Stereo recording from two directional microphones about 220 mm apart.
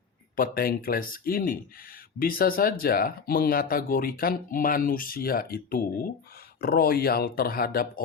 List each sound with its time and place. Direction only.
0.3 s speech: 40° left (ahead or behind)